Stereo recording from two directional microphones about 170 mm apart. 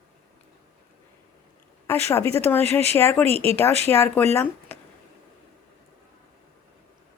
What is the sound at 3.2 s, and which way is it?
Speech, 35° right (ahead or behind).